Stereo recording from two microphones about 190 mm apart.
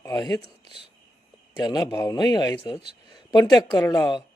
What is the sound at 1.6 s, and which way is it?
A man's voice, 20° left (ahead or behind).